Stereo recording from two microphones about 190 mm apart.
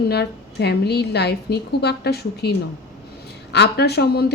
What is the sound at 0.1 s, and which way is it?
A woman's voice, 60° left (ahead or behind).